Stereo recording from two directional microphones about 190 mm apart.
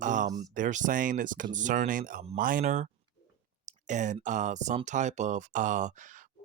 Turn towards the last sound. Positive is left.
turn(degrees=-40)  # may be behind; listen again after turning